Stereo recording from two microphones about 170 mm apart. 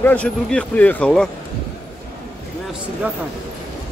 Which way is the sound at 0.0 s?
10° left (ahead or behind).